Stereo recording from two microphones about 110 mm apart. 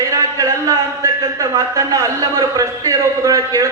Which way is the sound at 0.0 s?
30° right (ahead or behind).